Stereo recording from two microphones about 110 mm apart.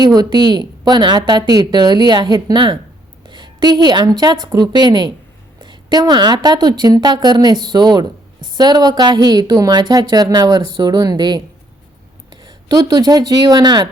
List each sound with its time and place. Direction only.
0.0 s a woman's voice: 40° right (ahead or behind)